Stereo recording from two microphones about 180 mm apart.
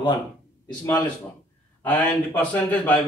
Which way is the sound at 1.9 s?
10° left (ahead or behind).